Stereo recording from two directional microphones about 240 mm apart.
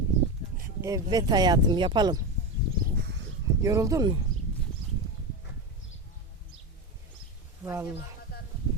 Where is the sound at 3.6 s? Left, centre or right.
Centre.